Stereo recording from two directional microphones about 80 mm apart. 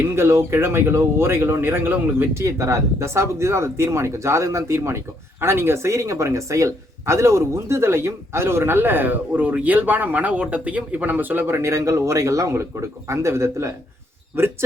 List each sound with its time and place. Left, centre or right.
0.2 s speech: right